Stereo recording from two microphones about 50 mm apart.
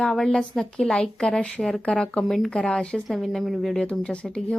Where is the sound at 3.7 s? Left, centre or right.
Left.